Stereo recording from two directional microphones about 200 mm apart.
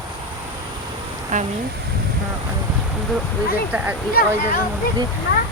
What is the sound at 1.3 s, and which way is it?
Speech, 40° right (ahead or behind).